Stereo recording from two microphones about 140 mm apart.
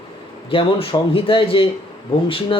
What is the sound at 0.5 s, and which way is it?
Speech, 40° left (ahead or behind).